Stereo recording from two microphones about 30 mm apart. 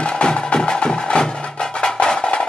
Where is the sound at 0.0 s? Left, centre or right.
Left.